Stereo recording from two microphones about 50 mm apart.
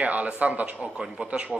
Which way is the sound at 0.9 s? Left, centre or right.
Centre.